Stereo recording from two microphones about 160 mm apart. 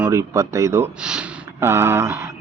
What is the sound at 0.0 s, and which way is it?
Speech, 20° right (ahead or behind).